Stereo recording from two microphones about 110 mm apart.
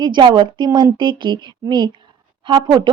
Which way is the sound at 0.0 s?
45° right (ahead or behind).